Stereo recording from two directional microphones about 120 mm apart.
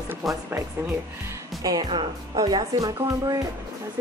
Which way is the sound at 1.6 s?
30° right (ahead or behind).